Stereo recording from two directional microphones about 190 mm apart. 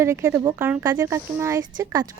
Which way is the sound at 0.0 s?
15° right (ahead or behind).